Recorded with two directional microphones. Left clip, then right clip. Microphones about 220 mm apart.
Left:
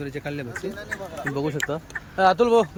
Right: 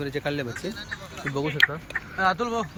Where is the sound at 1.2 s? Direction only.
20° left (ahead or behind).